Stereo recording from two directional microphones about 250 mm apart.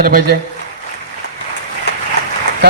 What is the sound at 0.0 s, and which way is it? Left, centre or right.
Speech, right.